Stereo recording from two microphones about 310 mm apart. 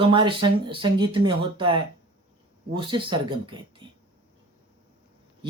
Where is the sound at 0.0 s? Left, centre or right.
Centre.